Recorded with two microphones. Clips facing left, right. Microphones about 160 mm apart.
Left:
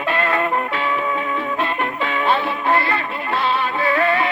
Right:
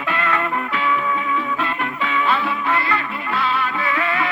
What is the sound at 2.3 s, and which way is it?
Music, 35° left (ahead or behind).